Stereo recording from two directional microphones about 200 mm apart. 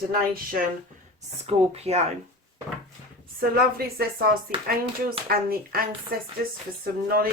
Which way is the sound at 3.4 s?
50° right (ahead or behind).